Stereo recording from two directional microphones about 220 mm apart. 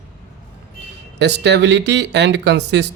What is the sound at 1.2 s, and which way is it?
Speech, 50° right (ahead or behind).